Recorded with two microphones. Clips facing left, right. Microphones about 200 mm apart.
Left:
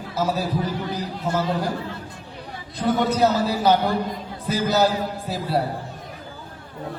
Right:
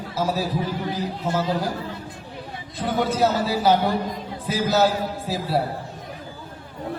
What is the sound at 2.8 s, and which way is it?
A man's voice, centre (ahead or behind).